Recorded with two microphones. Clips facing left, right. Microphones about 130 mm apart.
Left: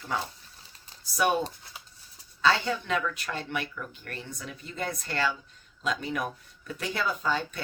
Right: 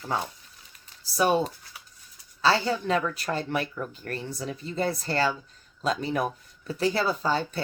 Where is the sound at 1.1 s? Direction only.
30° right (ahead or behind).